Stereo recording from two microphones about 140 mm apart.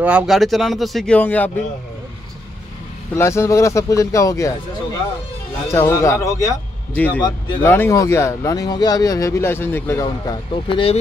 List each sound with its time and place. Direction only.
0.0 s speech: 10° right (ahead or behind); by 1.5 s 10° left (ahead or behind)
3.2 s speech: 20° left (ahead or behind)
5.7 s speech: 20° left (ahead or behind)
7.6 s speech: 15° left (ahead or behind)
10.0 s speech: 30° left (ahead or behind)